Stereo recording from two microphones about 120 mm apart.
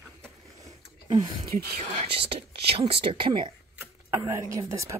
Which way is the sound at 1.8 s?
60° right (ahead or behind).